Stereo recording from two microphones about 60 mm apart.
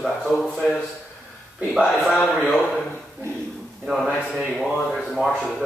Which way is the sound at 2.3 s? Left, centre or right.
Centre.